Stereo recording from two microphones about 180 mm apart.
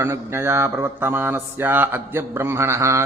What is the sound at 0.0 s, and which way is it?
Speech, 15° right (ahead or behind).